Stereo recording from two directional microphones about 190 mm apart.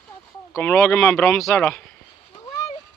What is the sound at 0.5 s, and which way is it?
Speech, 10° left (ahead or behind).